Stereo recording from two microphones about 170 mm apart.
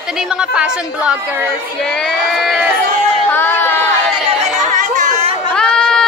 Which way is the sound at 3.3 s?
10° left (ahead or behind).